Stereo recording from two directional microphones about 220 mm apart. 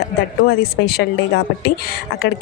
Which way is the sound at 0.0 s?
45° left (ahead or behind).